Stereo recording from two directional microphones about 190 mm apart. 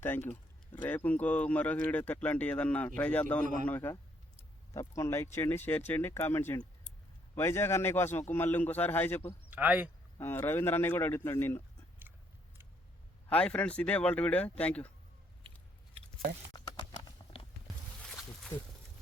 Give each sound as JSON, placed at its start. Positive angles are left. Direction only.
{"t": 0.0, "sound": "speech", "side_deg": 10}
{"t": 3.4, "sound": "a man's voice", "side_deg": -45}
{"t": 3.7, "sound": "speech", "side_deg": 10}
{"t": 9.5, "sound": "speech", "side_deg": -10}
{"t": 10.2, "sound": "speech", "side_deg": 15}
{"t": 13.3, "sound": "speech", "side_deg": 5}
{"t": 16.5, "sound": "a sound", "side_deg": 25}
{"t": 18.0, "sound": "a sound", "side_deg": 0}